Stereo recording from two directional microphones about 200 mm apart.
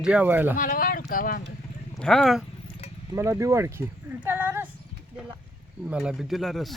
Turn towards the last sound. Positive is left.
turn(degrees=0)  # may be behind; listen again after turning